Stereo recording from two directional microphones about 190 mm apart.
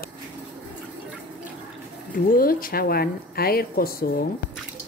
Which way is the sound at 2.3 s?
50° left (ahead or behind).